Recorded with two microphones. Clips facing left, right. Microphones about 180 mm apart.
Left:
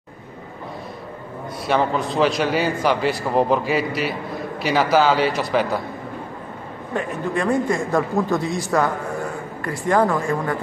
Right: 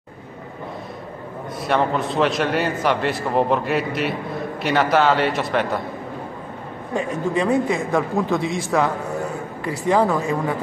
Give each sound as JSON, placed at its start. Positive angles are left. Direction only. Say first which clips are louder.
{"t": 1.7, "sound": "a man's voice", "louder": "even", "side_deg": 0}
{"t": 7.4, "sound": "a man's voice", "louder": "left 2 dB", "side_deg": -5}
{"t": 9.9, "sound": "speech", "louder": "left 1 dB", "side_deg": -5}